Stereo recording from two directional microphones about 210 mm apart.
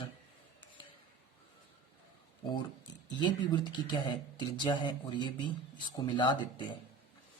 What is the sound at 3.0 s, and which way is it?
Speech, 20° left (ahead or behind).